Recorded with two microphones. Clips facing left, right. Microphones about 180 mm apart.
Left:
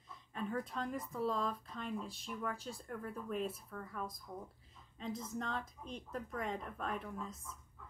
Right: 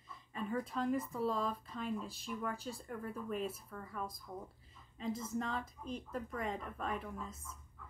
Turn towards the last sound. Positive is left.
turn(degrees=0)  # may be behind; listen again after turning